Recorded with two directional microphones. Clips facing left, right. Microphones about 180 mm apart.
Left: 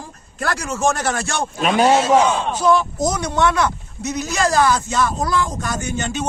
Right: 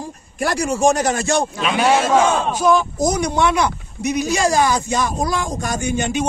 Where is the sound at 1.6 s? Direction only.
45° left (ahead or behind).